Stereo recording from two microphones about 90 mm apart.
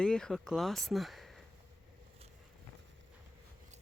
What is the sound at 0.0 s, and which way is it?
Speech, 10° left (ahead or behind).